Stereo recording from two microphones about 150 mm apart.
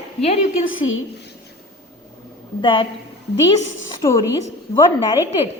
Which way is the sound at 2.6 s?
35° left (ahead or behind).